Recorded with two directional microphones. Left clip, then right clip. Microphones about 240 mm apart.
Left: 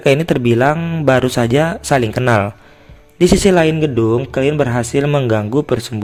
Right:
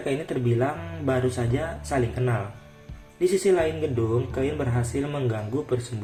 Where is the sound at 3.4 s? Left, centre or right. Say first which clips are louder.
Left 10 dB; left.